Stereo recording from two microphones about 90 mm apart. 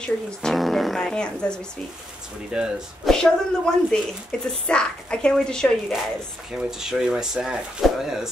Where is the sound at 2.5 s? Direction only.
5° right (ahead or behind).